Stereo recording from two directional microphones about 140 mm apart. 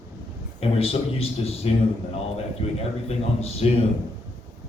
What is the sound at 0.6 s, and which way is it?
A man's voice, 45° left (ahead or behind).